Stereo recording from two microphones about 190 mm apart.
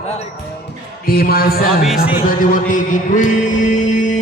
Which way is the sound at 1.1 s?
55° left (ahead or behind).